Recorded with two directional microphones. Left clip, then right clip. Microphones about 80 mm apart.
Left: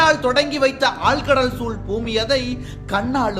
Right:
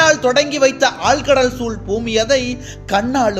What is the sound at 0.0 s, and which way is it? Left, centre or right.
Speech, right.